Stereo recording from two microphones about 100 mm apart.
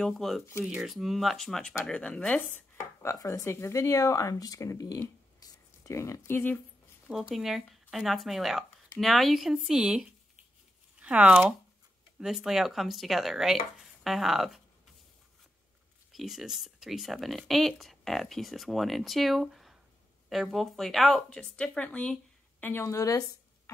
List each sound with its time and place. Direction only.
0.0 s speech: centre (ahead or behind)
3.0 s speech: 30° left (ahead or behind)
7.1 s speech: 5° right (ahead or behind)
16.1 s speech: centre (ahead or behind)
22.6 s a woman's voice: 25° left (ahead or behind)